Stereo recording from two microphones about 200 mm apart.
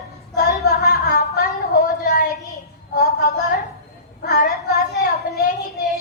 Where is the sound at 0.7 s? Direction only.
50° left (ahead or behind).